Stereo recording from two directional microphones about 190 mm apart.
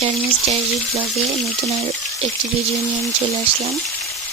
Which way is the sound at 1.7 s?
30° right (ahead or behind).